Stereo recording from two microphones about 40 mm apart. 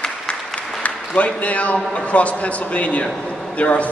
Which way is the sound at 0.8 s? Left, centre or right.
Left.